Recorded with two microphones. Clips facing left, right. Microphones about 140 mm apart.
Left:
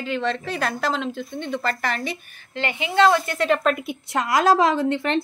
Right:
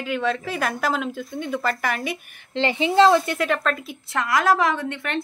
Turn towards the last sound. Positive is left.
turn(degrees=25)  # may be behind; listen again after turning